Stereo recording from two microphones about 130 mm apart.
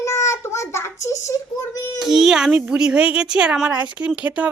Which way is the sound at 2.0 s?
5° right (ahead or behind).